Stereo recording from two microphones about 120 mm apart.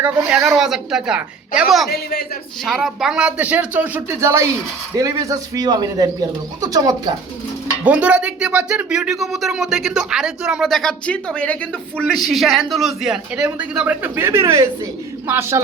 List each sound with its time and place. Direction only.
0.2 s speech: 5° right (ahead or behind); by 7.1 s 30° right (ahead or behind)
7.9 s speech: 10° right (ahead or behind)